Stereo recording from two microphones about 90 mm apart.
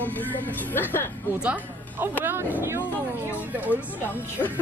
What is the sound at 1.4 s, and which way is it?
Speech, 15° right (ahead or behind).